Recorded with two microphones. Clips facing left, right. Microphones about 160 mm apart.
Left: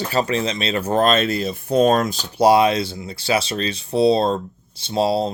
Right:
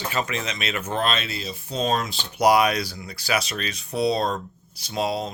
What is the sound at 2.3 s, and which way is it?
Speech, 30° left (ahead or behind).